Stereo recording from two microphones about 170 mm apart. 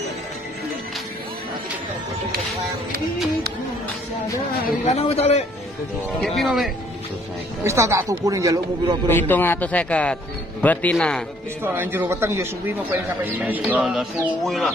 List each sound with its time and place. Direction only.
4.8 s a man's voice: 40° left (ahead or behind)
6.2 s speech: centre (ahead or behind)
7.6 s speech: 15° right (ahead or behind)
9.1 s speech: 10° left (ahead or behind)
11.6 s speech: 10° right (ahead or behind)